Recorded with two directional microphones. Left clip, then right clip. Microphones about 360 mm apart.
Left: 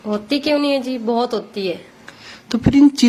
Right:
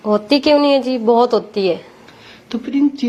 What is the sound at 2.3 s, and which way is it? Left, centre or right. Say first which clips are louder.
Speech: left 5 dB; left.